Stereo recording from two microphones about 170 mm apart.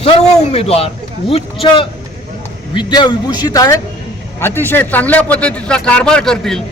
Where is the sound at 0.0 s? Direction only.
35° left (ahead or behind).